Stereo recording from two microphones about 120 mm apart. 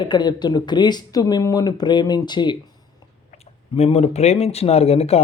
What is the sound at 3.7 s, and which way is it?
Speech, 60° left (ahead or behind).